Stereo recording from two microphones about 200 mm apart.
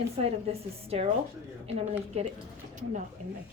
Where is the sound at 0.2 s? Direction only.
30° right (ahead or behind).